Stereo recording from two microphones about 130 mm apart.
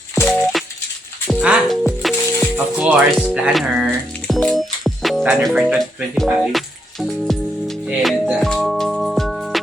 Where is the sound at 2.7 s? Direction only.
10° right (ahead or behind).